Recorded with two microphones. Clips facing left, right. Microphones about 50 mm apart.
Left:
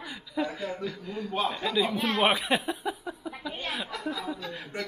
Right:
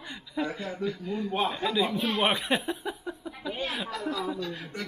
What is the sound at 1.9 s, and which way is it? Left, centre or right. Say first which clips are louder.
Speech: left 1 dB; left.